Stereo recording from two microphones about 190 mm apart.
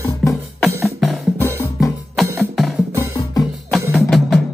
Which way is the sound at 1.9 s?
Centre (ahead or behind).